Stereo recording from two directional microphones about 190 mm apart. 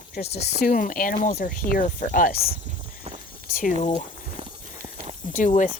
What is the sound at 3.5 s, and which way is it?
Speech, 45° left (ahead or behind).